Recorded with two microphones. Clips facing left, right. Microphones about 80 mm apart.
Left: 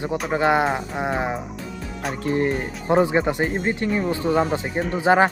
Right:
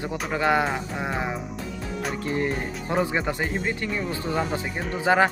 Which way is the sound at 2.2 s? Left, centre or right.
Left.